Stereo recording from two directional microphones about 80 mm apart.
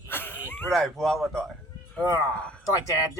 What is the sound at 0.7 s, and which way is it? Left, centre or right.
Speech, centre.